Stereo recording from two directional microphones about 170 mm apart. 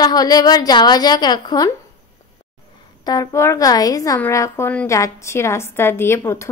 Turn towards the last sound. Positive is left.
turn(degrees=15)  # may be behind; listen again after turning